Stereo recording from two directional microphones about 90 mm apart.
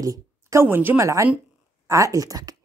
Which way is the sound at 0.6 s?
25° right (ahead or behind).